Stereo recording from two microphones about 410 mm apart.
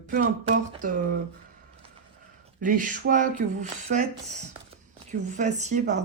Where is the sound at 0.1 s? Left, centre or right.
Right.